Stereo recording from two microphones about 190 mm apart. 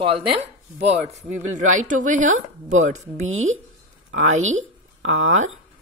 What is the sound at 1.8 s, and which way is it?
Speech, 40° right (ahead or behind).